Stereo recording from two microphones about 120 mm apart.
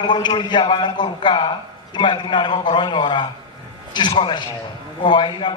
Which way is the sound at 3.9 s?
35° left (ahead or behind).